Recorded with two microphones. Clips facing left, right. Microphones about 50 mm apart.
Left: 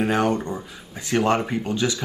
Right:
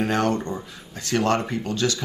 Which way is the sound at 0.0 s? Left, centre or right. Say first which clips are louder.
Left 1 dB; centre.